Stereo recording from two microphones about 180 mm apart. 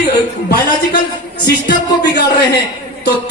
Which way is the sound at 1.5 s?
65° left (ahead or behind).